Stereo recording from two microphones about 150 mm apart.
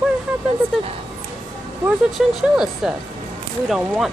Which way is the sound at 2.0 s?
Centre (ahead or behind).